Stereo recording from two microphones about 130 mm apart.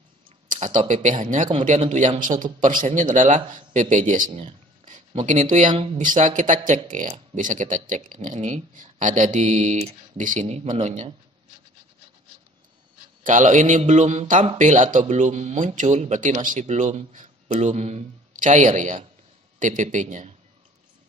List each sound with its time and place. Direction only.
0.6 s a man's voice: 75° right (ahead or behind)
2.2 s a man's voice: 85° right
5.7 s speech: 45° right (ahead or behind)
5.9 s a man's voice: 80° right
9.0 s a man's voice: 75° right (ahead or behind)
10.6 s speech: 65° right (ahead or behind)
13.2 s a man's voice: 75° right (ahead or behind)
17.5 s a man's voice: 60° right (ahead or behind)